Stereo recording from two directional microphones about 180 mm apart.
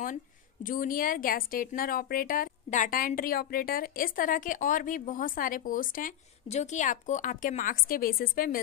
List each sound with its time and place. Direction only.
0.7 s a woman's voice: 50° left (ahead or behind)